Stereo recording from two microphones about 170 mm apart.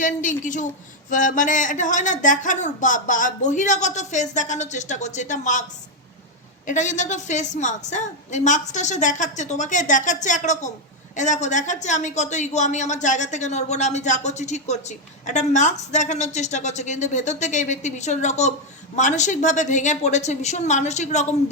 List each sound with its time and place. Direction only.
0.0 s a woman's voice: 50° left (ahead or behind)
6.7 s a woman's voice: 45° left (ahead or behind)